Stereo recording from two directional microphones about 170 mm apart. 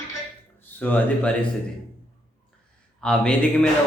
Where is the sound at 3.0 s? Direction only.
5° left (ahead or behind).